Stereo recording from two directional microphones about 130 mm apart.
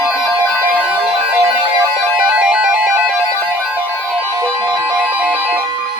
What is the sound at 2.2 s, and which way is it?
Music, 5° right (ahead or behind).